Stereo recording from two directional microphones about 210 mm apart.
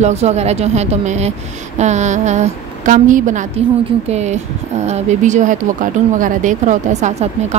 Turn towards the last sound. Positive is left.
turn(degrees=-35)  # may be behind; listen again after turning